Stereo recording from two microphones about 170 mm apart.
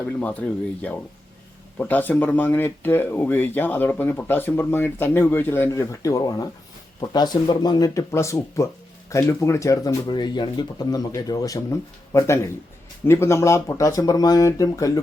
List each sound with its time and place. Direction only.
0.0 s speech: 10° left (ahead or behind)